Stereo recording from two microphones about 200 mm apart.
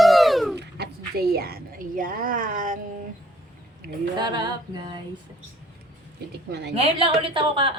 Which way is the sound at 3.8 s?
50° right (ahead or behind).